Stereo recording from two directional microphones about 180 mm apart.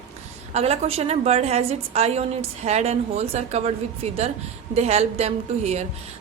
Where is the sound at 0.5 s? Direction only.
35° right (ahead or behind).